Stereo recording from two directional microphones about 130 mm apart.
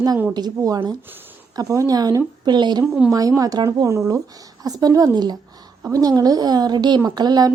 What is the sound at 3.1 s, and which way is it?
A woman's voice, 25° right (ahead or behind).